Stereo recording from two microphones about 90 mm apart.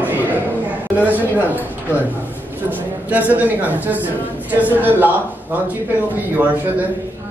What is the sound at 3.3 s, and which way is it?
Speech, 20° right (ahead or behind).